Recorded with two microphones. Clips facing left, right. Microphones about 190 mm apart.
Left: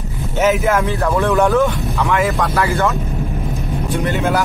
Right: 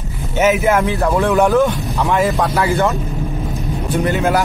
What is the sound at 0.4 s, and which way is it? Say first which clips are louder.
Speech: right 1 dB; 5° right (ahead or behind).